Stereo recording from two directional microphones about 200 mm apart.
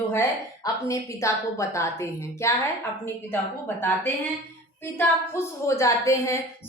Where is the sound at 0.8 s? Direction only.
15° left (ahead or behind).